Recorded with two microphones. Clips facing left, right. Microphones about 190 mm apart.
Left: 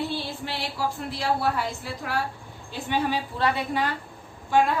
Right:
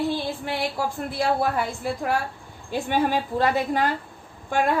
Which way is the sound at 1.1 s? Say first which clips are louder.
Right 4 dB; 50° right (ahead or behind).